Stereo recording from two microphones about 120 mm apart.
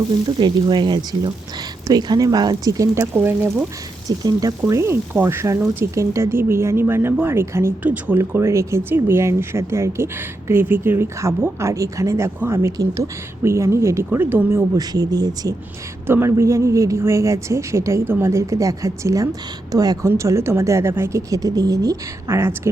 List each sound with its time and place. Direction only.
0.3 s speech: 40° right (ahead or behind); by 3.5 s 20° right (ahead or behind)
4.2 s speech: 35° right (ahead or behind); by 14.6 s 15° right (ahead or behind)
14.8 s speech: 30° right (ahead or behind)
16.0 s speech: 20° right (ahead or behind)